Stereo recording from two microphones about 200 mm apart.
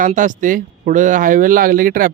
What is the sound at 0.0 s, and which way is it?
Speech, 40° right (ahead or behind).